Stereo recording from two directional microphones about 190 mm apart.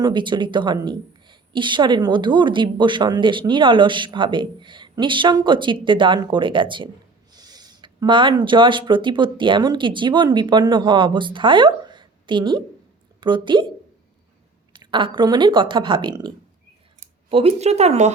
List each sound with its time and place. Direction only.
0.0 s a woman's voice: 25° right (ahead or behind)
14.7 s a woman's voice: 25° right (ahead or behind)